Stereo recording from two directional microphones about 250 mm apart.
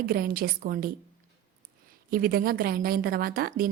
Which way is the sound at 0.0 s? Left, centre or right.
Right.